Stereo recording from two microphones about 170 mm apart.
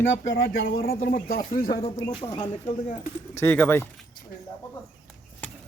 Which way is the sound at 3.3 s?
10° left (ahead or behind).